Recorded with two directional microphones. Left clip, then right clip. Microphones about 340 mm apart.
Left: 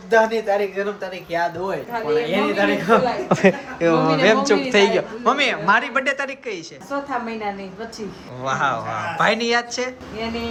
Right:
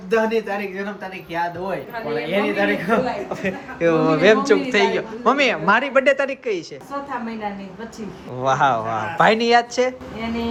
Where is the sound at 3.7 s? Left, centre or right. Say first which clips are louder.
Even; centre.